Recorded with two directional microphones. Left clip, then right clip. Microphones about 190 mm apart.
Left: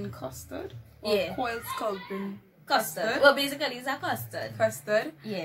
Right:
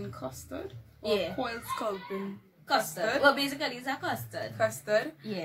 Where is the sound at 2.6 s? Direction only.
10° left (ahead or behind).